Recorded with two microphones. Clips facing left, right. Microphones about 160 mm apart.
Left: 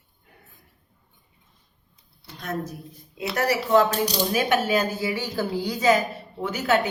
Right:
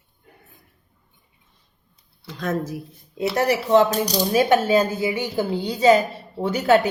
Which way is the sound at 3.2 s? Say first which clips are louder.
Right 4 dB; 30° right (ahead or behind).